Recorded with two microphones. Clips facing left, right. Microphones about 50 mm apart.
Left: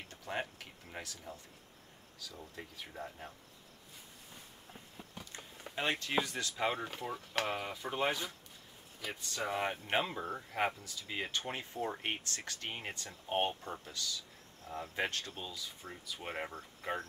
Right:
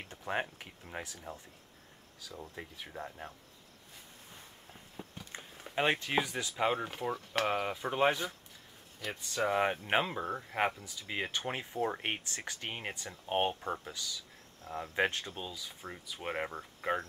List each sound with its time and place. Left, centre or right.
0.1 s speech: right
2.5 s speech: centre
5.3 s a sound: right
5.8 s speech: right